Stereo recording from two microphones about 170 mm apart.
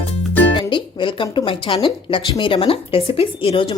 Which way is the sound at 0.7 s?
30° left (ahead or behind).